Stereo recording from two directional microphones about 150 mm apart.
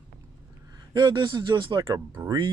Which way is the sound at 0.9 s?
30° right (ahead or behind).